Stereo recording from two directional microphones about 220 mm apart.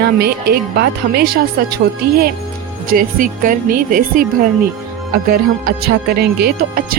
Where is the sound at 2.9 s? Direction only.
40° right (ahead or behind).